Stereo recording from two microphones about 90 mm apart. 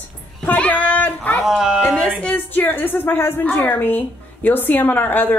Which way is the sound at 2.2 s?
20° left (ahead or behind).